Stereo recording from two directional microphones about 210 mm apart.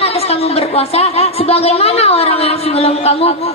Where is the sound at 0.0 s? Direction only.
30° left (ahead or behind).